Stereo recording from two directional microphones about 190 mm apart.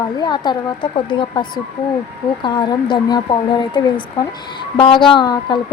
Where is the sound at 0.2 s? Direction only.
25° left (ahead or behind).